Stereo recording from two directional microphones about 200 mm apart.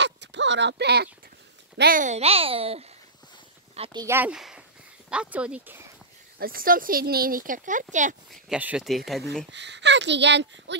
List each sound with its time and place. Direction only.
0.0 s a sound: 60° right (ahead or behind)
1.8 s a child's voice: 45° right (ahead or behind); by 4.0 s 30° right (ahead or behind)
4.0 s speech: 10° right (ahead or behind)
6.4 s speech: 45° right (ahead or behind)
8.3 s speech: 5° right (ahead or behind)
9.5 s speech: 60° right (ahead or behind)